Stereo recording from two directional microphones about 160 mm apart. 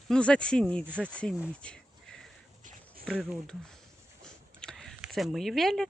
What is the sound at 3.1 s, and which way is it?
Speech, centre (ahead or behind).